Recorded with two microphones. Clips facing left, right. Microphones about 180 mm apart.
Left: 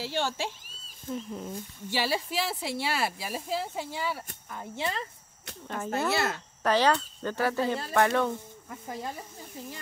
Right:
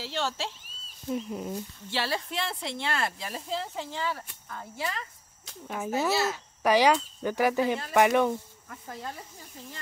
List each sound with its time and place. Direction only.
0.0 s speech: 10° left (ahead or behind)
1.1 s speech: 10° right (ahead or behind)
1.9 s speech: 10° left (ahead or behind)
5.7 s speech: 5° right (ahead or behind)
8.6 s speech: 15° left (ahead or behind)